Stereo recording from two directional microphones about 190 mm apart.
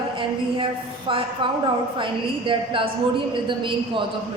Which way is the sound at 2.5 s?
25° right (ahead or behind).